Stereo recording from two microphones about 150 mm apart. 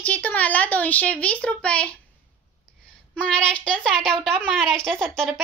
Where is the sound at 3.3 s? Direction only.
5° left (ahead or behind).